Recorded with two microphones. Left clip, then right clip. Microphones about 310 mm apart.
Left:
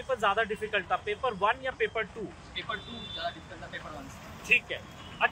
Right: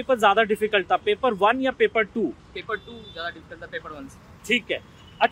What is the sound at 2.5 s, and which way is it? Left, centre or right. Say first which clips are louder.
Speech: right 1 dB; centre.